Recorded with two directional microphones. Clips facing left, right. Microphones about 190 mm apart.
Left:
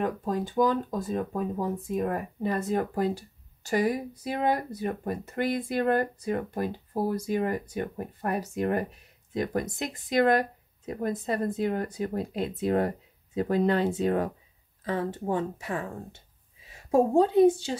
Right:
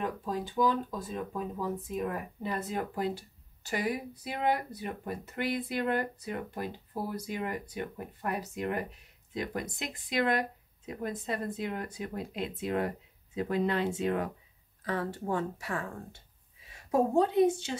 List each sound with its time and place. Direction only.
0.0 s speech: 45° left (ahead or behind)
14.9 s speech: 20° left (ahead or behind)